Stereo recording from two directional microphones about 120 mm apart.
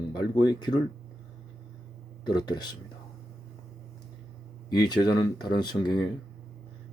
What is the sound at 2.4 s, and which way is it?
Speech, 35° left (ahead or behind).